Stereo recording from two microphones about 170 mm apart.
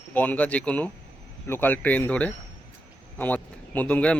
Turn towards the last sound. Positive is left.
turn(degrees=10)  # may be behind; listen again after turning